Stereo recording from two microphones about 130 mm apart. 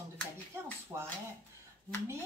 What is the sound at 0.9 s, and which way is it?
Speech, 20° right (ahead or behind).